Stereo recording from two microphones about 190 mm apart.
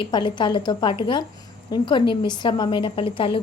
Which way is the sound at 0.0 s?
25° left (ahead or behind).